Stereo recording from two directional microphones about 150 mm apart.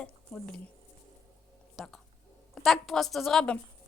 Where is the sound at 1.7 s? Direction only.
Centre (ahead or behind).